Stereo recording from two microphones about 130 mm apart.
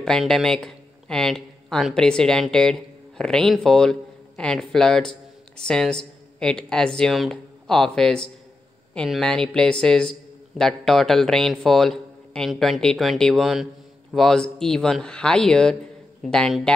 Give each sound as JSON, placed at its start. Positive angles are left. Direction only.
{"t": 0.0, "sound": "a man's voice", "side_deg": 5}